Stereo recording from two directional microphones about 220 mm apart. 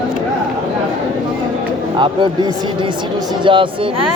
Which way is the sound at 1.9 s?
20° right (ahead or behind).